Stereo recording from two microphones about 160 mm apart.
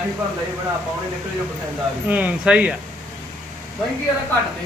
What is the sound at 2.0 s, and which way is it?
Speech, 10° right (ahead or behind).